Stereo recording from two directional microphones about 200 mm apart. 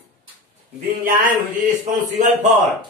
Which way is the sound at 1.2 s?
40° right (ahead or behind).